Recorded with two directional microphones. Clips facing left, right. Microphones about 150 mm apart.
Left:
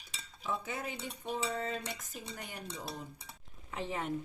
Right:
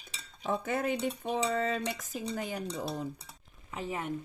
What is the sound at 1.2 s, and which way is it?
Speech, 90° right.